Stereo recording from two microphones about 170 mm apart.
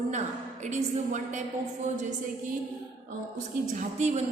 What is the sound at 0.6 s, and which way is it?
A woman's voice, 45° right (ahead or behind).